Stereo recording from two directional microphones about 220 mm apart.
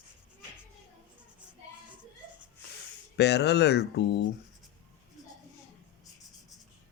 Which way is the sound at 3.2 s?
50° left (ahead or behind).